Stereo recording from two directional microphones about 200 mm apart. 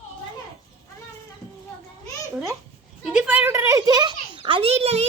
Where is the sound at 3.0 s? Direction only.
5° right (ahead or behind).